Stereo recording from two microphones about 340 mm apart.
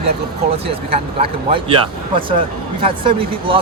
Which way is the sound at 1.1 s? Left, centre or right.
Centre.